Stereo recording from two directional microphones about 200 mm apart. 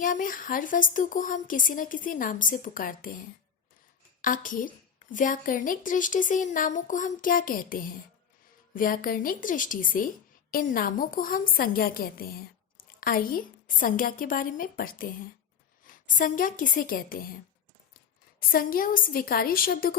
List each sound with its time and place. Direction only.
0.0 s a woman's voice: 40° left (ahead or behind)
4.2 s a woman's voice: 40° left (ahead or behind)